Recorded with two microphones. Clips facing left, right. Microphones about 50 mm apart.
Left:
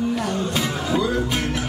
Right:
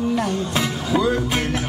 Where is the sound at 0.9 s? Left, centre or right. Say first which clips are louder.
Right 3 dB; right.